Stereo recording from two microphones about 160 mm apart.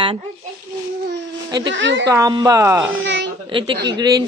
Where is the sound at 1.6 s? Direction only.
90° right.